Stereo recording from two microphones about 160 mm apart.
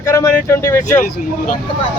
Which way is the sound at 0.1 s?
20° left (ahead or behind).